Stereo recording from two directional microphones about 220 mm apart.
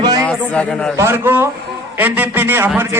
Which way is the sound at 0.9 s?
10° right (ahead or behind).